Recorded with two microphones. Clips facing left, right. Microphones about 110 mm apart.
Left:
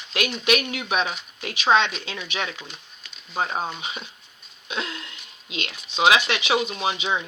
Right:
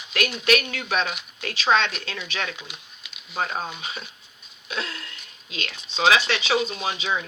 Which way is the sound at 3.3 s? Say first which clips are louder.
Left 2 dB; 20° left (ahead or behind).